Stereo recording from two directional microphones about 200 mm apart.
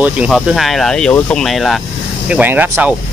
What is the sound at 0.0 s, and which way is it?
Speech, 5° right (ahead or behind).